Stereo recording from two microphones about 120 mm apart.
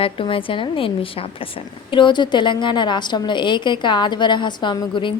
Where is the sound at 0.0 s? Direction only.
50° left (ahead or behind).